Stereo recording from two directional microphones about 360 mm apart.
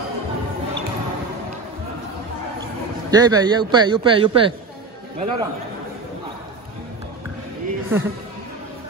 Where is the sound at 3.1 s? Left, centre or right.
Centre.